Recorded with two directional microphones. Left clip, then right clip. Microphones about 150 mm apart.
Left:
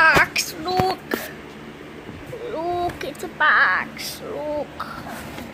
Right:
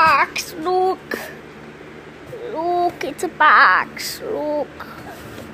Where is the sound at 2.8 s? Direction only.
30° right (ahead or behind).